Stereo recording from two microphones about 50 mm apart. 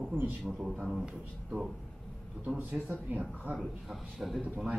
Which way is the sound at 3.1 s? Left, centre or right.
Right.